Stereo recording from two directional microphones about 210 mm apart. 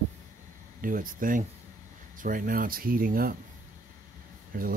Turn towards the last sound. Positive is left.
turn(degrees=-45)  # may be behind; listen again after turning